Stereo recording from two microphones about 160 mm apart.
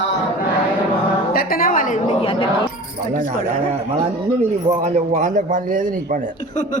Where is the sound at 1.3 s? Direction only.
65° left (ahead or behind).